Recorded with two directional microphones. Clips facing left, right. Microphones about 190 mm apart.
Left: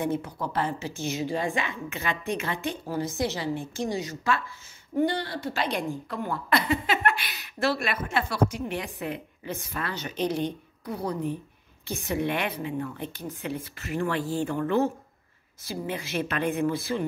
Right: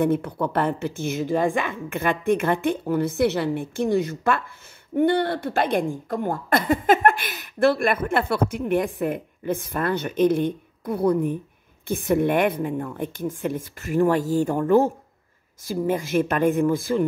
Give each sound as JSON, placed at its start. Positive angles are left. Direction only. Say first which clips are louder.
{"t": 0.0, "sound": "a woman's voice", "louder": "right 7 dB", "side_deg": -60}